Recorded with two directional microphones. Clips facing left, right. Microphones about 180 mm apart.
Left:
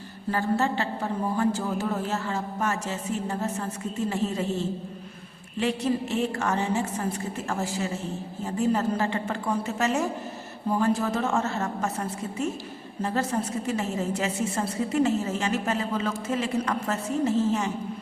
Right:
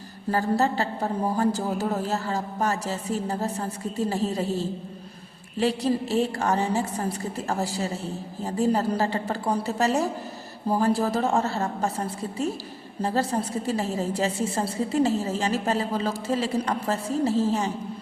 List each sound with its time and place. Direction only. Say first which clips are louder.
0.3 s a woman's voice: right 2 dB; 40° right (ahead or behind)